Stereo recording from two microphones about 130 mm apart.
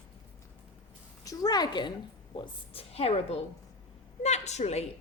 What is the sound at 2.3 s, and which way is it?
A woman's voice, 45° left (ahead or behind).